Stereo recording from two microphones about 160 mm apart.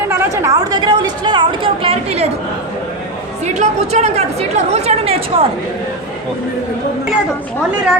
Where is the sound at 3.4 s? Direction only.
45° right (ahead or behind).